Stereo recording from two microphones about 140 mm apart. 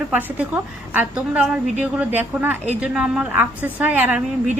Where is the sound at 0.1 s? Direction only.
10° right (ahead or behind).